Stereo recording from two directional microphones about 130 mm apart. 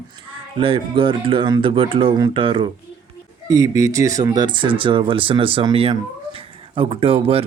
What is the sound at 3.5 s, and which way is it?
Speech, 25° right (ahead or behind).